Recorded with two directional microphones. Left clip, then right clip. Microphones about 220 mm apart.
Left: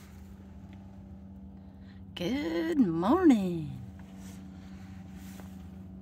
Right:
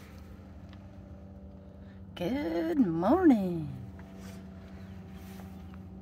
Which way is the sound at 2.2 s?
20° left (ahead or behind).